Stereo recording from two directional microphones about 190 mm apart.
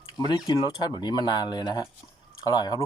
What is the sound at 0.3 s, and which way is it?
Speech, 20° left (ahead or behind).